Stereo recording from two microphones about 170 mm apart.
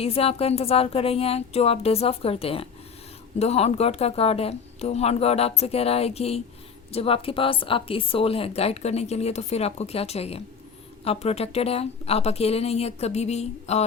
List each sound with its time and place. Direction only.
0.0 s a woman's voice: 35° left (ahead or behind)